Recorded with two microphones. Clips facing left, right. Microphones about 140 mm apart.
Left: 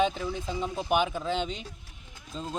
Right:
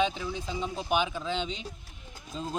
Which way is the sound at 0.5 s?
5° left (ahead or behind).